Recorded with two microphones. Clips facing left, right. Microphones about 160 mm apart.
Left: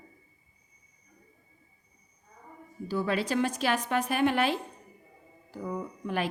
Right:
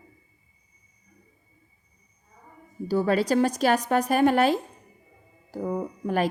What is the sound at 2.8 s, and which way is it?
A woman's voice, 40° right (ahead or behind).